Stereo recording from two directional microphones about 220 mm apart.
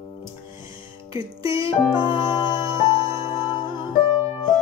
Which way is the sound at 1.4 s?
25° left (ahead or behind).